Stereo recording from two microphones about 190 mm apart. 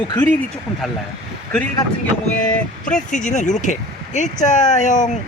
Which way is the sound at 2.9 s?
40° left (ahead or behind).